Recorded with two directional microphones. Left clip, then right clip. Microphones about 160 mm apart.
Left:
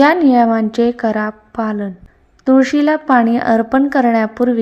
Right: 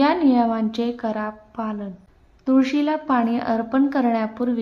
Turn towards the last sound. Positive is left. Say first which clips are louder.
# left 8 dB
turn(degrees=30)  # may be behind; listen again after turning